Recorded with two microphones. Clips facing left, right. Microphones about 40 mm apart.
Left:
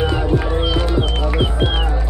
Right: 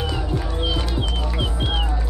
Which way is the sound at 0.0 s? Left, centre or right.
Left.